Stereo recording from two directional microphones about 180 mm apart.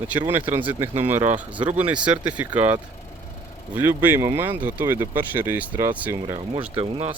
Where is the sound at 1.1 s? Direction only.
40° right (ahead or behind).